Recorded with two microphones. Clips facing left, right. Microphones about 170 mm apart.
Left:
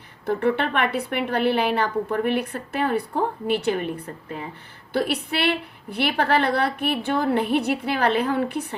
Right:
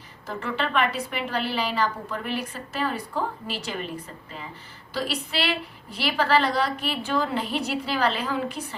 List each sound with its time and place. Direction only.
0.3 s a woman's voice: 60° left (ahead or behind)